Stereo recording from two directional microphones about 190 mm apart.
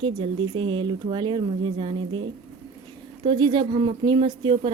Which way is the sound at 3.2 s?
25° right (ahead or behind).